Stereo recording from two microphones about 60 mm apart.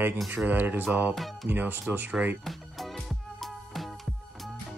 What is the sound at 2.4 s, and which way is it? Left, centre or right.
Music, centre.